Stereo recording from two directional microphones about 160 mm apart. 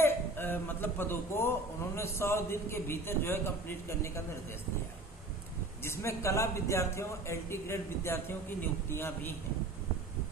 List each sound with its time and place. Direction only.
0.0 s a woman's voice: 15° left (ahead or behind)
5.8 s a man's voice: 15° left (ahead or behind)